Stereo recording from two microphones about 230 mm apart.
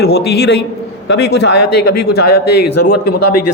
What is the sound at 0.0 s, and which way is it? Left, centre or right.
A man's voice, left.